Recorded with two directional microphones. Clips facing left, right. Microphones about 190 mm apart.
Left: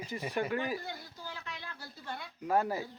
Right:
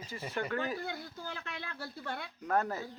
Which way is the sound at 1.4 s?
55° right (ahead or behind).